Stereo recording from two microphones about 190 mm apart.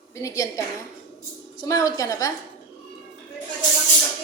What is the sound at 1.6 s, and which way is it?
Speech, 20° left (ahead or behind).